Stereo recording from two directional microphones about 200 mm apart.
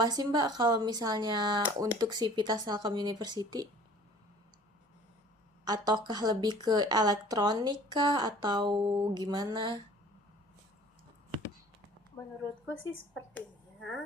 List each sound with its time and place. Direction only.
0.0 s speech: 20° right (ahead or behind)
5.6 s speech: 20° right (ahead or behind)
12.2 s a woman's voice: 15° left (ahead or behind)